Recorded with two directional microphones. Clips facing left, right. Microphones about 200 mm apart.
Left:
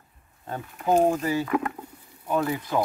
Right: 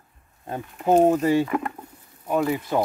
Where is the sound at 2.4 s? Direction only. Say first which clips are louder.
Right 3 dB; 20° right (ahead or behind).